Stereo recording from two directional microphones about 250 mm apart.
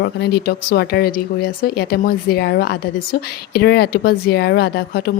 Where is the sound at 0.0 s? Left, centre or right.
Left.